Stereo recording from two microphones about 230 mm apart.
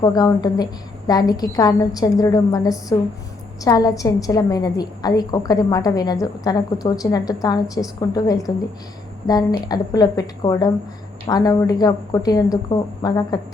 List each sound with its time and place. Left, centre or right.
0.0 s a woman's voice: centre